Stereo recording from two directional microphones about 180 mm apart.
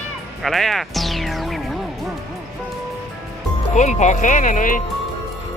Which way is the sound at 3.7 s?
40° left (ahead or behind).